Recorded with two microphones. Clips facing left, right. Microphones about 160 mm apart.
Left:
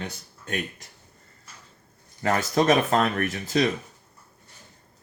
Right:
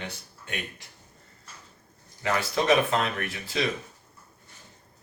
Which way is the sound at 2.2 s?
45° left (ahead or behind).